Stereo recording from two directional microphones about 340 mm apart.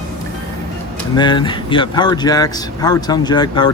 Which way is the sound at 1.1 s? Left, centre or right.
Centre.